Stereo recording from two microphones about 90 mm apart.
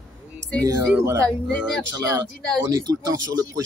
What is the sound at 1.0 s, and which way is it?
Speech, 35° right (ahead or behind).